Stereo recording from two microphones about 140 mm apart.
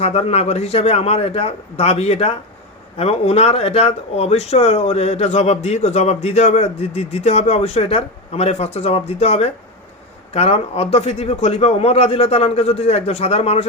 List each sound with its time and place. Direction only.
0.0 s a man's voice: 45° left (ahead or behind)